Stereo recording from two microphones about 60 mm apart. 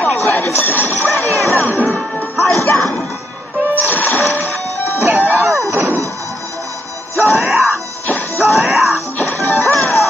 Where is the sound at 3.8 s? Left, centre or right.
Left.